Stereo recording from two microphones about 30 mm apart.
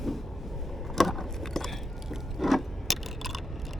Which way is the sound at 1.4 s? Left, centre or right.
Centre.